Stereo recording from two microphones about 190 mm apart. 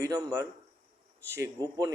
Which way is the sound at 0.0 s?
15° right (ahead or behind).